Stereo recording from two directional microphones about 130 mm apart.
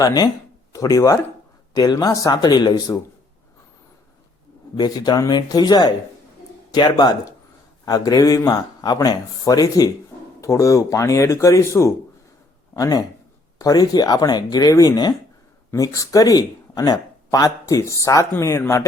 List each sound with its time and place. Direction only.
0.0 s speech: 30° left (ahead or behind)
4.8 s speech: 30° left (ahead or behind)